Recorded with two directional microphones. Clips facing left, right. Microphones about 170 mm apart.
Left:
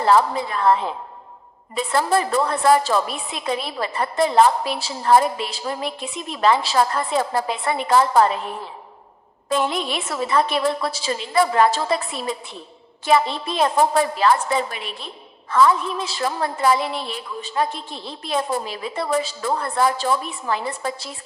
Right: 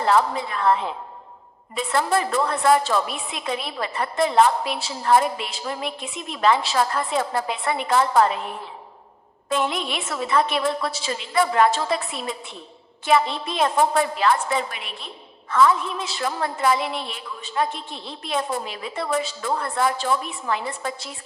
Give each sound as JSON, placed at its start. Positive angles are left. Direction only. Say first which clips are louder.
{"t": 0.1, "sound": "a woman's voice", "louder": "left 3 dB", "side_deg": 35}
{"t": 1.7, "sound": "a woman's voice", "louder": "left 2 dB", "side_deg": 35}
{"t": 9.5, "sound": "a woman's voice", "louder": "left 2 dB", "side_deg": 35}